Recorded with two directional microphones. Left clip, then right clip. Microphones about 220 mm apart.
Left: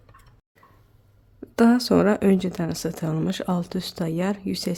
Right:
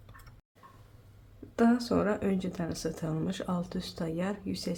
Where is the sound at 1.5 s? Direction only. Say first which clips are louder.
Left 8 dB; 40° left (ahead or behind).